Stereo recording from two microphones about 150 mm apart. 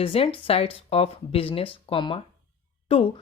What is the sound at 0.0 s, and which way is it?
Speech, 40° left (ahead or behind).